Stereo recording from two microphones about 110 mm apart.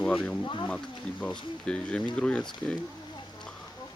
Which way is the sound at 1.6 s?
10° left (ahead or behind).